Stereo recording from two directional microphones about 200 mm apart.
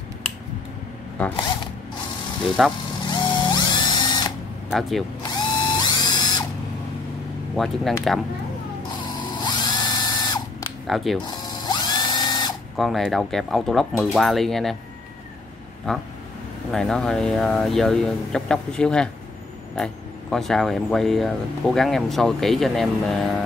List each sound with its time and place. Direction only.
2.4 s speech: centre (ahead or behind)
3.1 s ratchet: 20° left (ahead or behind)
4.7 s speech: centre (ahead or behind)
5.3 s ratchet: 20° left (ahead or behind)
7.5 s speech: centre (ahead or behind)
9.2 s drill: 20° left (ahead or behind)
11.2 s ratchet: 20° left (ahead or behind)
12.7 s speech: centre (ahead or behind)
15.9 s speech: 5° left (ahead or behind)